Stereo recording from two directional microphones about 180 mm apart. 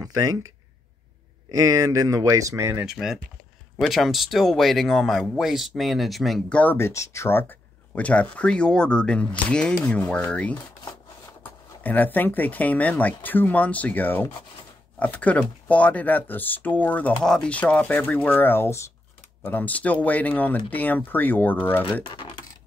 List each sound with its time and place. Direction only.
0.0 s speech: 20° right (ahead or behind)
1.5 s speech: 20° right (ahead or behind); by 21.8 s 10° left (ahead or behind)
22.0 s speech: 30° left (ahead or behind)